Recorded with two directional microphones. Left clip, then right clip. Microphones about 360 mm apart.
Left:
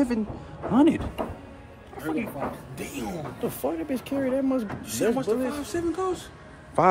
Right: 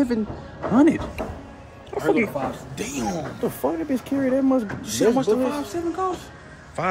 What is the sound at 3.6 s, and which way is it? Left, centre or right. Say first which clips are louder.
Speech: right 4 dB; centre.